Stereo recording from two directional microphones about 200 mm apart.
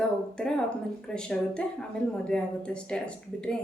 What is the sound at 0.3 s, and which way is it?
A woman's voice, 5° left (ahead or behind).